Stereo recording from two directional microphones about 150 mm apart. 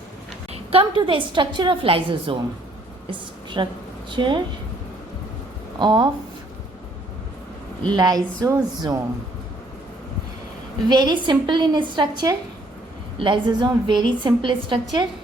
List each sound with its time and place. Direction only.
0.5 s a woman's voice: 40° right (ahead or behind)
5.8 s a woman's voice: 30° right (ahead or behind)
7.9 s a woman's voice: 25° right (ahead or behind)
10.8 s a woman's voice: 30° right (ahead or behind)